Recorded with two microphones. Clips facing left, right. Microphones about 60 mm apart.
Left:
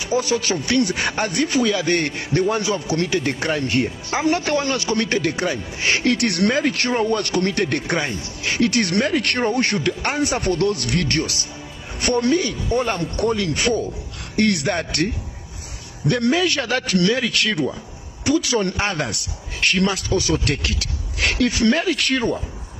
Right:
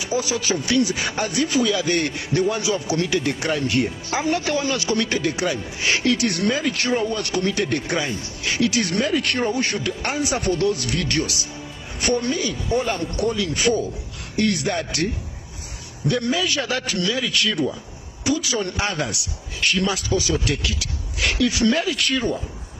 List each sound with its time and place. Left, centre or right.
0.0 s a man's voice: left
4.2 s a man's voice: left
4.7 s a man's voice: left
11.1 s a man's voice: left
12.0 s a man's voice: left
16.1 s a man's voice: left
18.8 s a man's voice: left
19.6 s a man's voice: left
21.5 s a man's voice: left